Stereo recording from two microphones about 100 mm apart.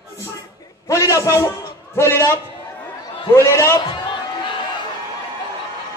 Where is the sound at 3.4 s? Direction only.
25° left (ahead or behind).